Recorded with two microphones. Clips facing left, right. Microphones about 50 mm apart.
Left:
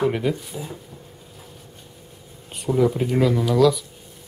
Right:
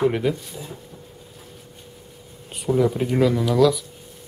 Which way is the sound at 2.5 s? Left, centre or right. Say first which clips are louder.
Even; centre.